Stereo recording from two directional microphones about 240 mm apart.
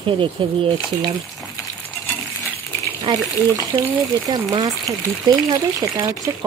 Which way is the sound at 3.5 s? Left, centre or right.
Centre.